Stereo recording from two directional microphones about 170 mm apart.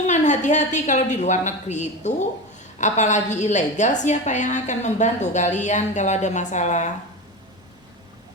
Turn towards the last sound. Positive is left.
turn(degrees=45)  # may be behind; listen again after turning